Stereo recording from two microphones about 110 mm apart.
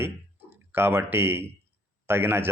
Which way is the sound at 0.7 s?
20° right (ahead or behind).